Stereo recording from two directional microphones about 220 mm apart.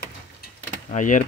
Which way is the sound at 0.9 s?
35° left (ahead or behind).